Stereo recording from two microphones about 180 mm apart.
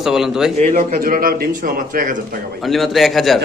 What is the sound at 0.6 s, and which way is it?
Speech, 35° right (ahead or behind).